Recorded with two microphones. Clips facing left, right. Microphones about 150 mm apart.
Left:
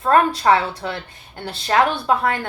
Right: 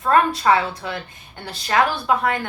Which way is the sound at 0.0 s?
30° left (ahead or behind).